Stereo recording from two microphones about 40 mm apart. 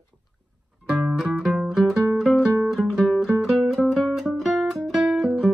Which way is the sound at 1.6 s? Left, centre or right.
Centre.